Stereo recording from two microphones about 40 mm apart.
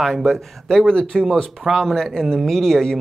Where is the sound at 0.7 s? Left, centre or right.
Centre.